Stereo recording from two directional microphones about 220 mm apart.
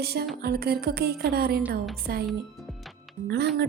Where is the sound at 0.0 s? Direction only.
45° right (ahead or behind).